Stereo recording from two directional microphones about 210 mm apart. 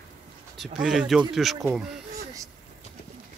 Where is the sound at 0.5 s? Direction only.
Centre (ahead or behind).